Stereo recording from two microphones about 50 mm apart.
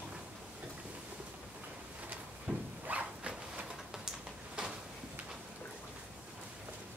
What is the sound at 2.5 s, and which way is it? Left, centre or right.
Dog, centre.